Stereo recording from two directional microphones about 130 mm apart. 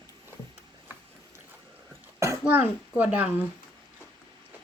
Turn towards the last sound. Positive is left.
turn(degrees=-15)  # may be behind; listen again after turning